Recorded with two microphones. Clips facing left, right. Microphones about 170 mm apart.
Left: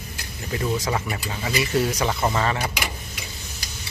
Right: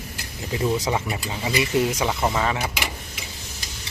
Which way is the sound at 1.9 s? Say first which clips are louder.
Even; 5° right (ahead or behind).